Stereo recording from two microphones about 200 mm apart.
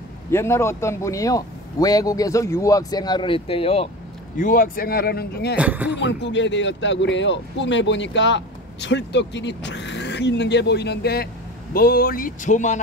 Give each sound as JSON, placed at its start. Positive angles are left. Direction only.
{"t": 0.3, "sound": "speech", "side_deg": 15}
{"t": 4.4, "sound": "speech", "side_deg": 45}
{"t": 5.6, "sound": "speech", "side_deg": -10}
{"t": 5.9, "sound": "speech", "side_deg": 65}